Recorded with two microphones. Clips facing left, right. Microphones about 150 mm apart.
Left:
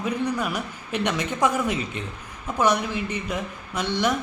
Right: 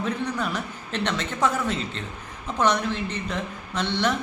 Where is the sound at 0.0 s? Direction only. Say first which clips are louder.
Left 2 dB; 10° left (ahead or behind).